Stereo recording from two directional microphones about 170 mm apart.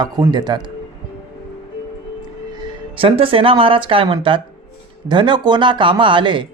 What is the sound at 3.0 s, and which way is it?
Speech, 35° right (ahead or behind).